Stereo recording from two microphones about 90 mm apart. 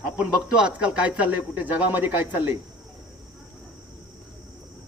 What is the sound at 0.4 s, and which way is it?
Speech, 10° right (ahead or behind).